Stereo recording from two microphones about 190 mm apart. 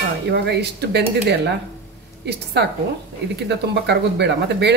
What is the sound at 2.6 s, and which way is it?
Speech, 60° right (ahead or behind).